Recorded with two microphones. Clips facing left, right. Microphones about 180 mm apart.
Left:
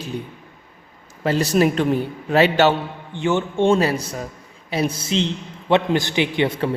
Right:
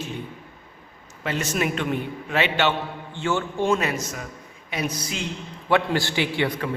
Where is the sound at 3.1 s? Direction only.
20° left (ahead or behind).